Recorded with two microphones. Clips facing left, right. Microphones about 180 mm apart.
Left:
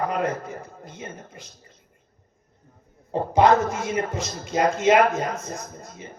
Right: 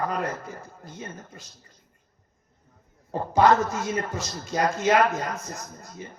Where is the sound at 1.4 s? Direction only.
15° left (ahead or behind).